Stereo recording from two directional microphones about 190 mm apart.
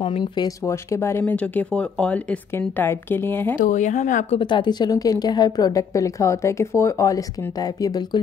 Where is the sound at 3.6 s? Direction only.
40° left (ahead or behind).